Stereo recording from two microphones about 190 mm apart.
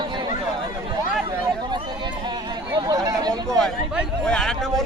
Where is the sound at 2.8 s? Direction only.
20° right (ahead or behind).